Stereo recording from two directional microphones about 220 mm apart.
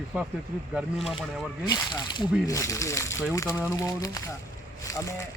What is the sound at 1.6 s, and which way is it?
Speech, 20° left (ahead or behind).